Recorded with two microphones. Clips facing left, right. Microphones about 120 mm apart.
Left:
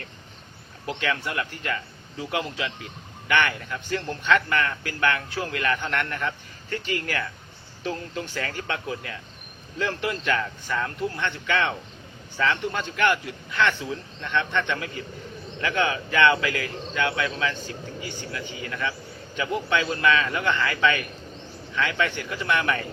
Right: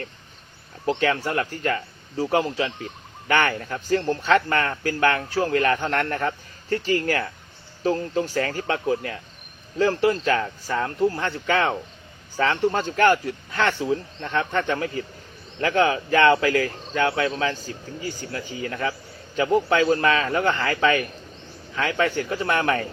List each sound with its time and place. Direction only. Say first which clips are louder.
0.9 s speech: right 6 dB; 40° right (ahead or behind)